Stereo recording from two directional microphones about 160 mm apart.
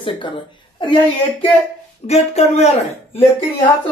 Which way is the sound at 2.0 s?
45° left (ahead or behind).